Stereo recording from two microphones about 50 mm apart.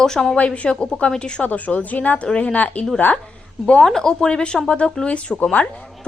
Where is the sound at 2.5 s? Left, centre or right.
Left.